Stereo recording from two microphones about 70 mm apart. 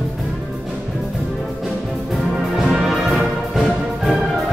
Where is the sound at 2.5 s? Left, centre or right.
Centre.